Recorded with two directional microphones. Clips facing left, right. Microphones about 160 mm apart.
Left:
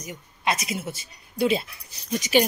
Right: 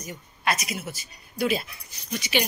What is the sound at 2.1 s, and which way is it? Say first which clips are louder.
Speech: left 6 dB; 40° left (ahead or behind).